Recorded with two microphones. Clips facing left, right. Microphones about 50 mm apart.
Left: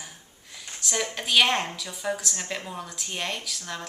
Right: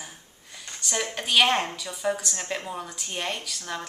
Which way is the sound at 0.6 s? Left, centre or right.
Centre.